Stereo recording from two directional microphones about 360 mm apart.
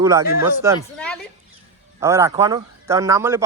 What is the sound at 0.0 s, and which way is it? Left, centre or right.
Speech, centre.